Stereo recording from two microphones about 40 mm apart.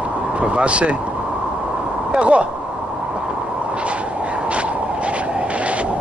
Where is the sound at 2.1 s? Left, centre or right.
Right.